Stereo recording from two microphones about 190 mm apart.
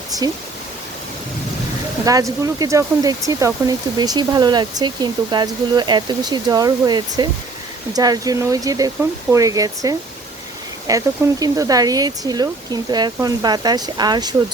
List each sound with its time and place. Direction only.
2.0 s speech: 15° right (ahead or behind)